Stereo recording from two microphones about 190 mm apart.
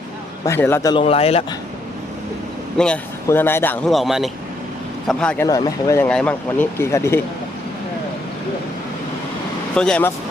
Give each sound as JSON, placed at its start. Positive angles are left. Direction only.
{"t": 0.4, "sound": "speech", "side_deg": 15}
{"t": 0.9, "sound": "a man's voice", "side_deg": 30}
{"t": 2.7, "sound": "speech", "side_deg": 5}
{"t": 5.5, "sound": "speech", "side_deg": 20}
{"t": 6.1, "sound": "speech", "side_deg": 5}
{"t": 9.7, "sound": "speech", "side_deg": 5}